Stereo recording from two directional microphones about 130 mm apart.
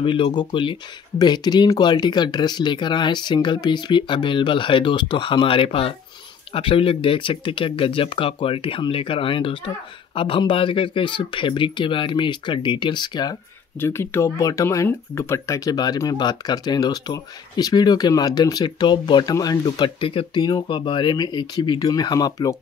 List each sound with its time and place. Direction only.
0.0 s speech: 40° left (ahead or behind)
13.7 s speech: 20° left (ahead or behind)